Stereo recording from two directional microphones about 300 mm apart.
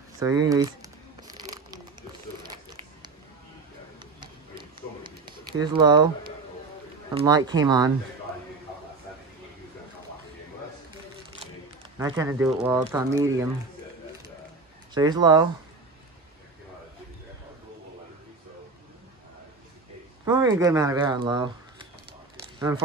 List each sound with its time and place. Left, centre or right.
0.2 s crumpling: centre
4.0 s a sound: centre
5.6 s speech: centre
7.2 s speech: centre
12.0 s speech: centre
15.0 s speech: centre
20.2 s speech: centre